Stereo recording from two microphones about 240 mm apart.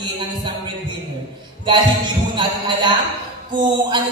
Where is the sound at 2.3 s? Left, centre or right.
Centre.